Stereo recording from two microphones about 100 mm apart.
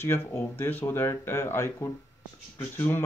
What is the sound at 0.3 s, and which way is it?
Speech, 25° left (ahead or behind).